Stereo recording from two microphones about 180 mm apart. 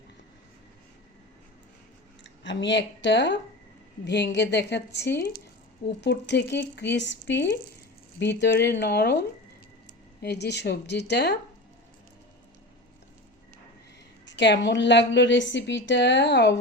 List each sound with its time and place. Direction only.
2.2 s speech: 90° left; by 9.1 s 70° left (ahead or behind)
10.2 s speech: 65° left (ahead or behind)
14.3 s a woman's voice: 75° left (ahead or behind)